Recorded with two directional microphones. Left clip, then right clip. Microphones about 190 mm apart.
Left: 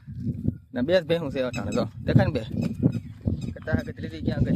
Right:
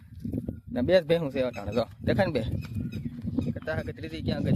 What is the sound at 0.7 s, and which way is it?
Speech, 5° left (ahead or behind).